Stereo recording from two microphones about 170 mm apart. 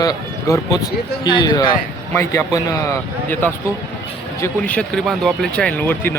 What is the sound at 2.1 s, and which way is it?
Speech, 15° left (ahead or behind).